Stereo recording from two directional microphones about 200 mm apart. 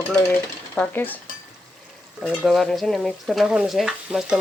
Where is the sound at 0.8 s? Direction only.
10° left (ahead or behind).